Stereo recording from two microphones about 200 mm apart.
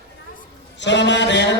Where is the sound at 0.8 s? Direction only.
60° left (ahead or behind).